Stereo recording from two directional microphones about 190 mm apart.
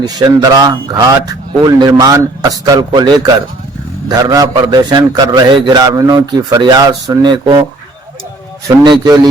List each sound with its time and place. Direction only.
0.0 s a man's voice: 20° right (ahead or behind)
8.6 s a man's voice: 20° right (ahead or behind)